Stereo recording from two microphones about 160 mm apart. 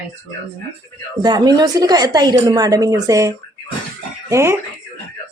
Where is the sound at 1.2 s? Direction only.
25° right (ahead or behind).